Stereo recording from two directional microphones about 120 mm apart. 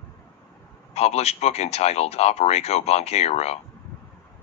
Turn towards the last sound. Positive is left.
turn(degrees=60)  # may be behind; listen again after turning